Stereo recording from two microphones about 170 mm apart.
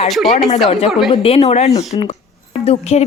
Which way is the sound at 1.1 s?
35° left (ahead or behind).